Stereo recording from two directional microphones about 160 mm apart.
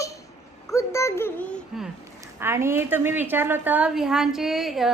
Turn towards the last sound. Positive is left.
turn(degrees=0)  # may be behind; listen again after turning